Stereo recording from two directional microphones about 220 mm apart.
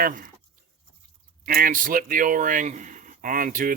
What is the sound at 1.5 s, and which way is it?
Speech, 40° right (ahead or behind).